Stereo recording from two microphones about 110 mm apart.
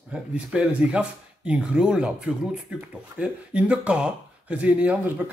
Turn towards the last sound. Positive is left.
turn(degrees=-15)  # may be behind; listen again after turning